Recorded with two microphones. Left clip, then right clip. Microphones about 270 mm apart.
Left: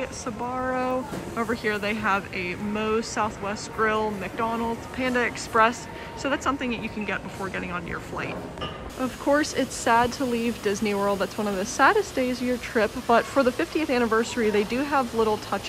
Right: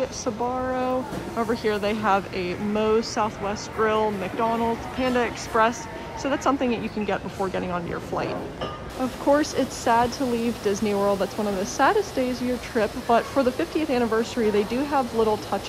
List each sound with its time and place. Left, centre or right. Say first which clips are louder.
0.0 s speech: right 5 dB; centre